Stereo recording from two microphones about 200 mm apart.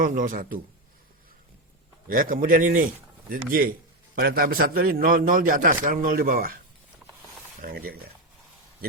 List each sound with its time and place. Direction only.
0.0 s a man's voice: 45° right (ahead or behind)
2.0 s a man's voice: 45° right (ahead or behind)
7.6 s a man's voice: 45° right (ahead or behind)